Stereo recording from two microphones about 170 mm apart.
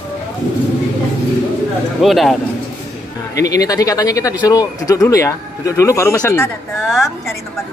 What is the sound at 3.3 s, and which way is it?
Speech, 20° left (ahead or behind).